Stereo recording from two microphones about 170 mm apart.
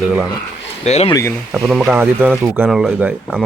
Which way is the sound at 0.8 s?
40° left (ahead or behind).